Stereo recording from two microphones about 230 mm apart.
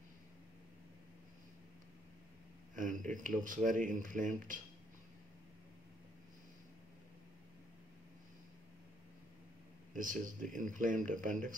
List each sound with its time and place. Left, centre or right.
2.7 s speech: right
9.9 s speech: right